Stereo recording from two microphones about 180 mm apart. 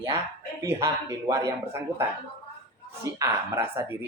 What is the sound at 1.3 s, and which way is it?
Speech, 15° right (ahead or behind).